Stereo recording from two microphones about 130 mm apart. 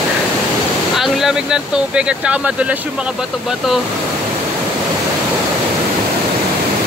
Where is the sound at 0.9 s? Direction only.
Centre (ahead or behind).